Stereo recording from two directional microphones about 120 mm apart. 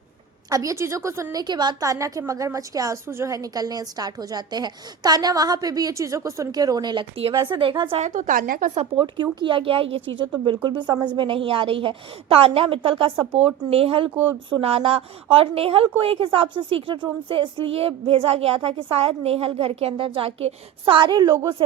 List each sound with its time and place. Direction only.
0.5 s a woman's voice: 25° right (ahead or behind); by 8.0 s 45° right (ahead or behind)
8.0 s speech: 90° right
9.0 s a woman's voice: 40° right (ahead or behind)